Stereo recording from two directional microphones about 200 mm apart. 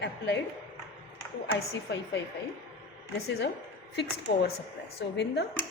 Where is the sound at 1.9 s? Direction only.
60° left (ahead or behind).